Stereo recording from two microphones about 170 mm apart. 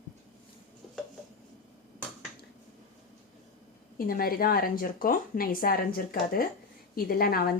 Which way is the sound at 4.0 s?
60° left (ahead or behind).